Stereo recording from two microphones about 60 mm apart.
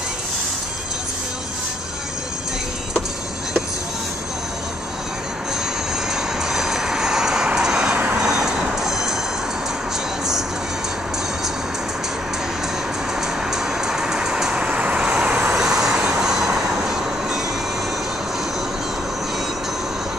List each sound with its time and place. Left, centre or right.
6.5 s music: centre
7.9 s vehicle: right
8.2 s music: centre
13.5 s vehicle: centre
15.5 s vehicle: centre